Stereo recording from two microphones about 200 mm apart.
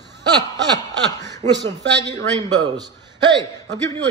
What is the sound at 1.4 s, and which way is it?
A man's voice, 20° right (ahead or behind).